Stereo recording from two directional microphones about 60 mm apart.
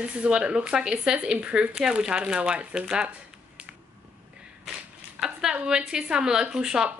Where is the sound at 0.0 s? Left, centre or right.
Centre.